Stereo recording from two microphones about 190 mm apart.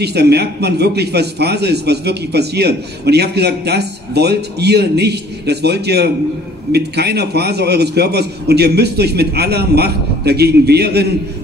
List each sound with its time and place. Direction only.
0.0 s a man's voice: 60° right (ahead or behind)